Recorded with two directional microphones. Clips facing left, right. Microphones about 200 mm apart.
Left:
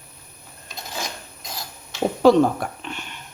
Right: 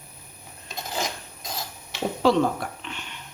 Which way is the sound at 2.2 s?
50° left (ahead or behind).